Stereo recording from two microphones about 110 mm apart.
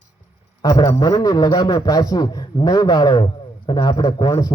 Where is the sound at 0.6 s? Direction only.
35° left (ahead or behind).